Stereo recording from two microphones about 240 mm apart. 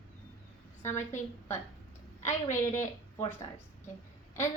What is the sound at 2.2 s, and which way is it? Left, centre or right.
A woman's voice, centre.